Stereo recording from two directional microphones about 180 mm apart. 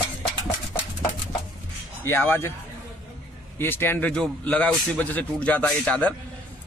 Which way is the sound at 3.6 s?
10° left (ahead or behind).